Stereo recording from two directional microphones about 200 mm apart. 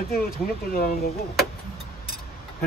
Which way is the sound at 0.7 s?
45° left (ahead or behind).